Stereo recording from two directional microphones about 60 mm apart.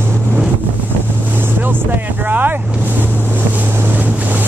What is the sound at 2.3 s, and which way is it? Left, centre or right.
Vehicle, right.